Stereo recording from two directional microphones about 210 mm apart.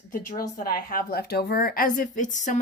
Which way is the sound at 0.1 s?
40° left (ahead or behind).